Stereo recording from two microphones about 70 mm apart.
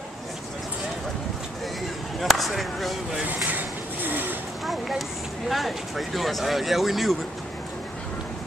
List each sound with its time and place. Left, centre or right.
2.1 s speech: centre
3.2 s vehicle: right
4.6 s speech: centre